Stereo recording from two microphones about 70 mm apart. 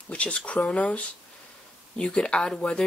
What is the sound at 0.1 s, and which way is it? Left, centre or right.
Speech, centre.